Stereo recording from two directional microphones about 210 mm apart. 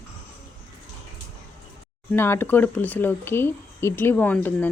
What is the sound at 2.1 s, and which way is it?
Speech, 10° left (ahead or behind).